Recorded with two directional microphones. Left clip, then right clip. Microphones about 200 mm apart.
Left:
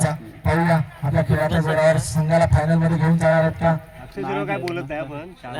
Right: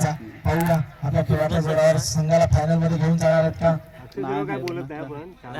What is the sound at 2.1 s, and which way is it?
Speech, 40° right (ahead or behind).